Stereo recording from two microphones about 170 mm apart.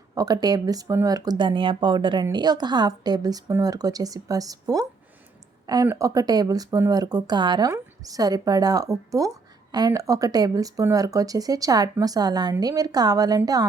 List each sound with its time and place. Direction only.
0.1 s speech: 20° right (ahead or behind)